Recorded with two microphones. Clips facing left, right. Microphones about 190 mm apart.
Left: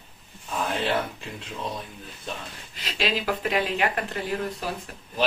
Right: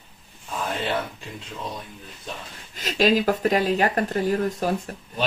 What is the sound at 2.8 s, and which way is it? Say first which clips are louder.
Speech: right 8 dB; 45° right (ahead or behind).